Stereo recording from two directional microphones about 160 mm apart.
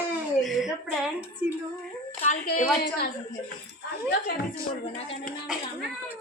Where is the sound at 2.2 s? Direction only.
50° left (ahead or behind).